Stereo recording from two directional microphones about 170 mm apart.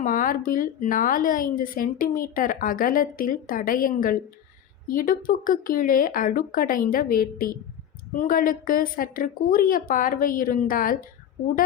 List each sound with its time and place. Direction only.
0.0 s a woman's voice: 55° left (ahead or behind)